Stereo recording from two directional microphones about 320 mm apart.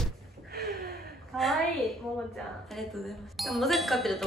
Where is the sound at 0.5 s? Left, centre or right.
Right.